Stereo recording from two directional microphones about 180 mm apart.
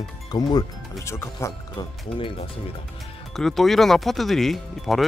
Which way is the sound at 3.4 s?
Centre (ahead or behind).